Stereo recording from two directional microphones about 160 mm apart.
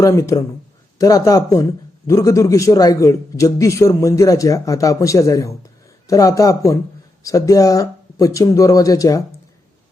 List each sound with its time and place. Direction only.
0.0 s a man's voice: 20° left (ahead or behind)